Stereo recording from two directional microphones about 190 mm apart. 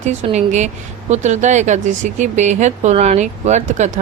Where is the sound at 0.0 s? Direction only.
40° right (ahead or behind).